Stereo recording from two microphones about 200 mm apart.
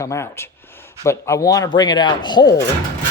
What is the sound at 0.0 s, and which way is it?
Speech, 15° left (ahead or behind).